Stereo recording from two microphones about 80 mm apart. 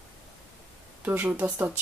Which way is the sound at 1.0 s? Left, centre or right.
Right.